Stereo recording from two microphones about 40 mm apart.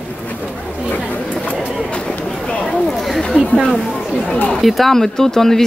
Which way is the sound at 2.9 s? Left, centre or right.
Centre.